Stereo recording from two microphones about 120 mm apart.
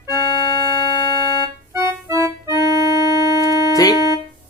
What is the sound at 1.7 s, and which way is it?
Music, 25° right (ahead or behind).